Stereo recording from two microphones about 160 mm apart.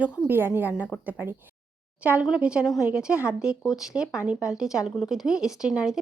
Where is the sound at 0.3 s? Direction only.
15° right (ahead or behind).